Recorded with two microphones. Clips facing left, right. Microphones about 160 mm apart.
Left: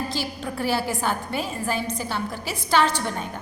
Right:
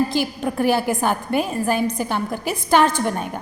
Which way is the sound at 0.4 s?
50° right (ahead or behind).